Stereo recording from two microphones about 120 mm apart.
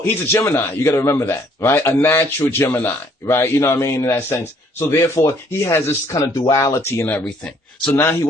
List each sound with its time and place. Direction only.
0.3 s a man's voice: 20° left (ahead or behind)
7.3 s speech: 10° left (ahead or behind)
7.9 s a man's voice: 25° left (ahead or behind)